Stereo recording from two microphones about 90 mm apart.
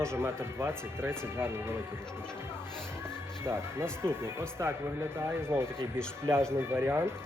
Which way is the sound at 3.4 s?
25° right (ahead or behind).